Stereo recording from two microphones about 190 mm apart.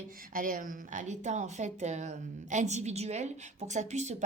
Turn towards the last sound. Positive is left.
turn(degrees=-40)  # may be behind; listen again after turning